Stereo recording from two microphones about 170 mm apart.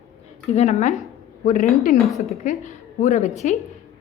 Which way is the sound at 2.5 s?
45° left (ahead or behind).